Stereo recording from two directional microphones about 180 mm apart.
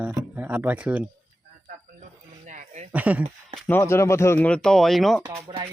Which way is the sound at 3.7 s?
15° left (ahead or behind).